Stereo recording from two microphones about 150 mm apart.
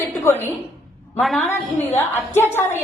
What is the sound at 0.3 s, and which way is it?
Speech, 20° left (ahead or behind).